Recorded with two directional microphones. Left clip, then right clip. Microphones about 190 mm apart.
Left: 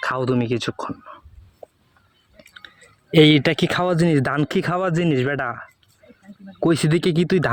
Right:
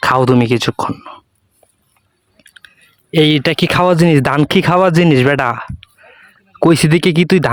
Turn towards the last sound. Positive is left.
turn(degrees=-25)  # may be behind; listen again after turning